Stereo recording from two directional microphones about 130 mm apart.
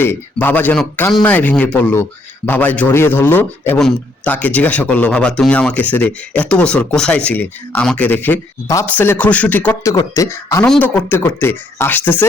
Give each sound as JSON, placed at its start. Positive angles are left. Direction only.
{"t": 0.0, "sound": "speech", "side_deg": 15}
{"t": 3.8, "sound": "speech", "side_deg": 5}